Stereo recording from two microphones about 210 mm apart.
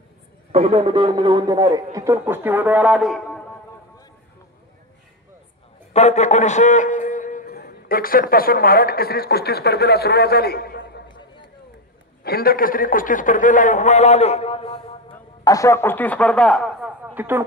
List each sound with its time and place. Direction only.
0.5 s a man's voice: 30° right (ahead or behind); by 3.4 s centre (ahead or behind)
5.9 s a man's voice: 30° left (ahead or behind); by 11.0 s 50° left (ahead or behind)
12.2 s a man's voice: 45° left (ahead or behind); by 16.9 s centre (ahead or behind)
17.0 s a sound: 10° right (ahead or behind)